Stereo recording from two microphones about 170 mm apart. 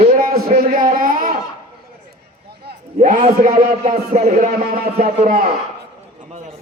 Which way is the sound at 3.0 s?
45° right (ahead or behind).